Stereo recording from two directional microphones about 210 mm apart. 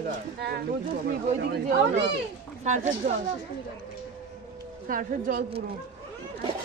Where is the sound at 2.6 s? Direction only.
35° right (ahead or behind).